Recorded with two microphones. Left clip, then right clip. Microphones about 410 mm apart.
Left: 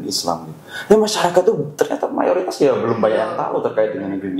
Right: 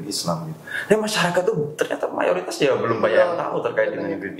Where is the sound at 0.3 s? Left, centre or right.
Left.